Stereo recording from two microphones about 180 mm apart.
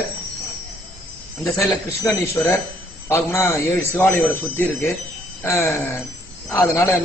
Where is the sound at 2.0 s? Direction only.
10° left (ahead or behind).